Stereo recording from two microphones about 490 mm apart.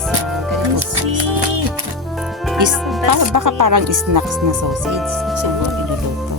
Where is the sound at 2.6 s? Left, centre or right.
Right.